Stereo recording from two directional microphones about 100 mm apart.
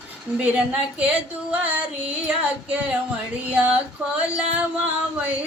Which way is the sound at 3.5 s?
10° right (ahead or behind).